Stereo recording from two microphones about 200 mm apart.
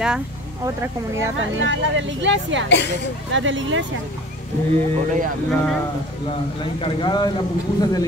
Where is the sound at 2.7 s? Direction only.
60° left (ahead or behind).